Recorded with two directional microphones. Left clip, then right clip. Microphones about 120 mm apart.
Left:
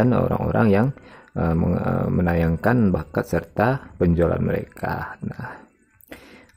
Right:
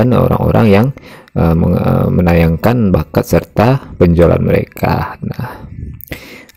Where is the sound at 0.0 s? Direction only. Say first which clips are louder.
Right 9 dB; 45° right (ahead or behind).